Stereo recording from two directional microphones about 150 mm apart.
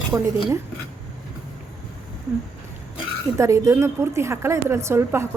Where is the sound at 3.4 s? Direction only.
20° right (ahead or behind).